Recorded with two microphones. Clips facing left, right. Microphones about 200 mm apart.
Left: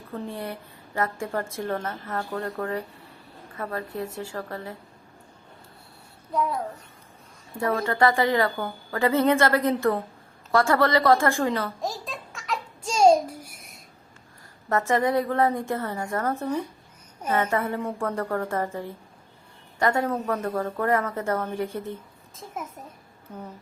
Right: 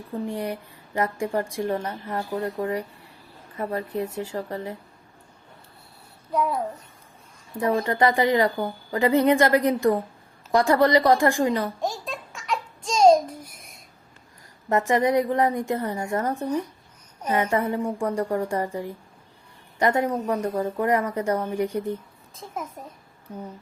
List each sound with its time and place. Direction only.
0.1 s a woman's voice: 15° right (ahead or behind)
7.5 s a woman's voice: 15° right (ahead or behind)
11.8 s a sound: centre (ahead or behind)
14.7 s a woman's voice: 15° right (ahead or behind)